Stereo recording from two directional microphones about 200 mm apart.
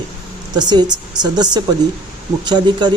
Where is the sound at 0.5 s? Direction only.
20° right (ahead or behind).